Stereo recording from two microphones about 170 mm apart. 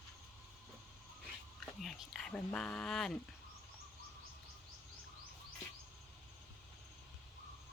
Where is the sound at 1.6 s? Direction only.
Centre (ahead or behind).